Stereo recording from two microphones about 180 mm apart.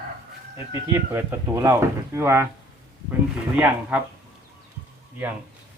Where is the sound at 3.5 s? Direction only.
10° right (ahead or behind).